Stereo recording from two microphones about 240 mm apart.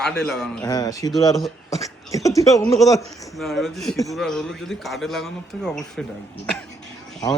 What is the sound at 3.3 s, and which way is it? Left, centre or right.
A man's voice, centre.